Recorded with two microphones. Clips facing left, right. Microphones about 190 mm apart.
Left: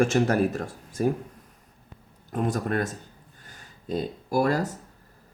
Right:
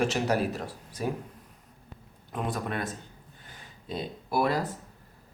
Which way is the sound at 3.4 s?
45° left (ahead or behind).